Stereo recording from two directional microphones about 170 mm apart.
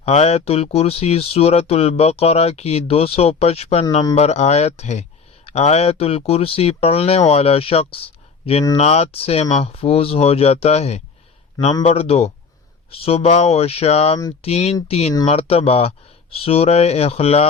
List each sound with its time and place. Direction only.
0.0 s speech: 40° left (ahead or behind)